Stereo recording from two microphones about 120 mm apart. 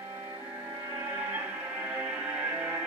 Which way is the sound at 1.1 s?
15° right (ahead or behind).